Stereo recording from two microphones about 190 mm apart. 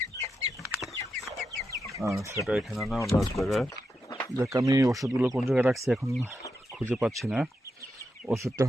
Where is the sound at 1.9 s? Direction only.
15° right (ahead or behind).